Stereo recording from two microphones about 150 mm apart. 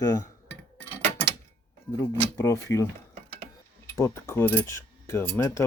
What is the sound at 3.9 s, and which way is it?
Speech, 20° left (ahead or behind).